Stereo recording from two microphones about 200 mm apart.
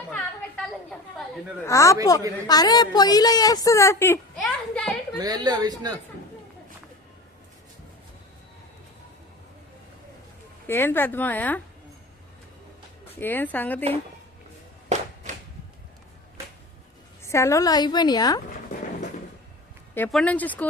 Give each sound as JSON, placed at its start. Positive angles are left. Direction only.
{"t": 0.1, "sound": "chatter", "side_deg": 0}
{"t": 1.6, "sound": "a woman's voice", "side_deg": 15}
{"t": 5.2, "sound": "a woman's voice", "side_deg": -20}
{"t": 10.7, "sound": "speech", "side_deg": 10}
{"t": 13.1, "sound": "speech", "side_deg": 10}
{"t": 17.2, "sound": "a woman's voice", "side_deg": 15}
{"t": 20.1, "sound": "speech", "side_deg": 5}